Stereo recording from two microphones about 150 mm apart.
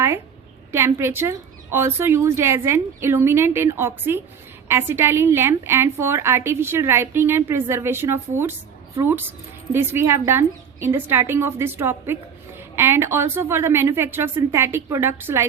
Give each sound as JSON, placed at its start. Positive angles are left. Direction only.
{"t": 0.7, "sound": "a woman's voice", "side_deg": -15}